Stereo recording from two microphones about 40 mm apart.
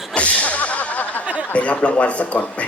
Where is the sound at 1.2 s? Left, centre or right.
Right.